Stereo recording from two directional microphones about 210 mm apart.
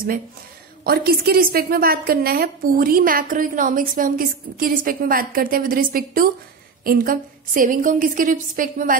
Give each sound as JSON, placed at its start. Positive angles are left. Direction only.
{"t": 0.8, "sound": "a woman's voice", "side_deg": -45}